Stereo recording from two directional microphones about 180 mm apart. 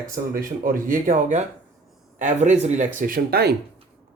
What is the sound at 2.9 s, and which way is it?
Speech, 50° right (ahead or behind).